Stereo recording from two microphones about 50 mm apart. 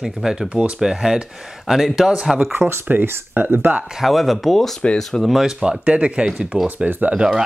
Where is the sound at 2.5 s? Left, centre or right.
Right.